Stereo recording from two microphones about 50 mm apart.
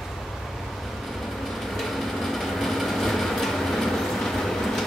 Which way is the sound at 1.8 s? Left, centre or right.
Centre.